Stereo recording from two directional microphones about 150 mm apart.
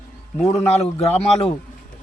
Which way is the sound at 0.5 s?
45° left (ahead or behind).